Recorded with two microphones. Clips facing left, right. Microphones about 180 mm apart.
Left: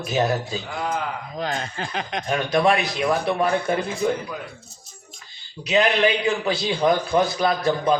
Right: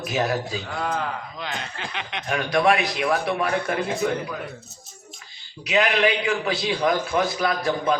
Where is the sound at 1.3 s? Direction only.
40° left (ahead or behind).